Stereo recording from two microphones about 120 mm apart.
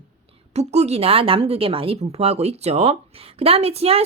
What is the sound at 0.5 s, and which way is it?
Speech, 65° right (ahead or behind).